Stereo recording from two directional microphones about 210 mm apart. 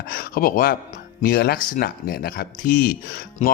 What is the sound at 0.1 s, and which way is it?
Speech, 45° left (ahead or behind).